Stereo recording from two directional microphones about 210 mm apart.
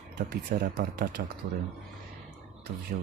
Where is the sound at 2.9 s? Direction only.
35° right (ahead or behind).